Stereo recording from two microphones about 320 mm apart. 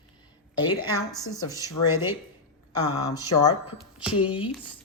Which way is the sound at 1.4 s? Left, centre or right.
Centre.